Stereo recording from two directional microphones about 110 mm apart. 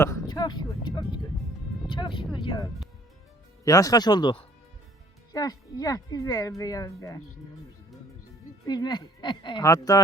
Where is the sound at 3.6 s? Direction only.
30° left (ahead or behind).